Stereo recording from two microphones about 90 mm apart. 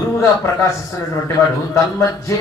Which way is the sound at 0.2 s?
30° left (ahead or behind).